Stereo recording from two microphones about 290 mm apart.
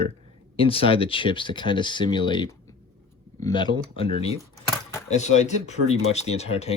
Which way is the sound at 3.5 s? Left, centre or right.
Centre.